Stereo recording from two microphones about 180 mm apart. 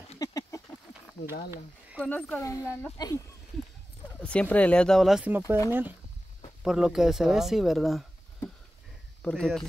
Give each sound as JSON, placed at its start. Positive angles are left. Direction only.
{"t": 0.2, "sound": "a sound", "side_deg": 20}
{"t": 2.0, "sound": "speech", "side_deg": 5}
{"t": 4.2, "sound": "speech", "side_deg": 5}
{"t": 9.2, "sound": "speech", "side_deg": 5}